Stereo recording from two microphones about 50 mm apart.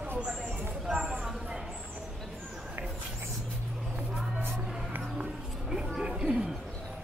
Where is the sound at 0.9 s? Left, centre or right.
Centre.